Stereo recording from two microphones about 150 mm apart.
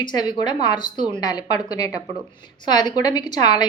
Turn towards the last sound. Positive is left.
turn(degrees=25)  # may be behind; listen again after turning